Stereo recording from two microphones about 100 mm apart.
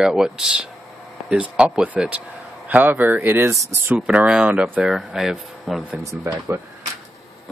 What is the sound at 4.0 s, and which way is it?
Speech, 10° right (ahead or behind).